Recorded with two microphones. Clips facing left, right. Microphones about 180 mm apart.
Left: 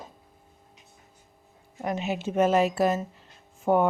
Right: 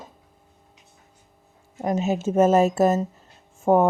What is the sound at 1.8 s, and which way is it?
Speech, 45° right (ahead or behind).